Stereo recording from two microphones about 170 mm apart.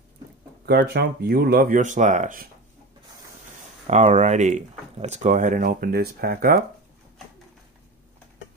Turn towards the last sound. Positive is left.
turn(degrees=-60)  # may be behind; listen again after turning